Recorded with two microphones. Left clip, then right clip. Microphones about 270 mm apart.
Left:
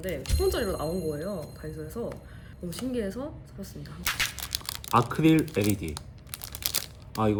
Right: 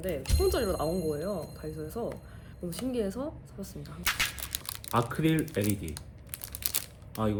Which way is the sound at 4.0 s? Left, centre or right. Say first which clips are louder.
Left 1 dB; centre.